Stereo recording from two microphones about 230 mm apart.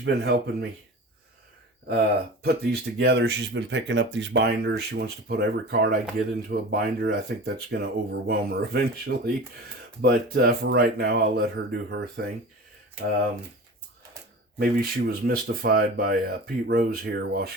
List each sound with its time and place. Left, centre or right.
0.0 s speech: right
2.4 s speech: right
14.6 s speech: right